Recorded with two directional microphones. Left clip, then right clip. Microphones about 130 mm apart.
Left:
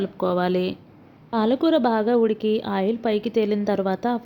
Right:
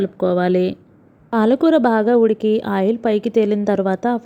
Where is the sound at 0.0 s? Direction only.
30° right (ahead or behind).